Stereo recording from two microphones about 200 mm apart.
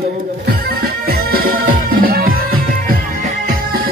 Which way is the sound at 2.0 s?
45° right (ahead or behind).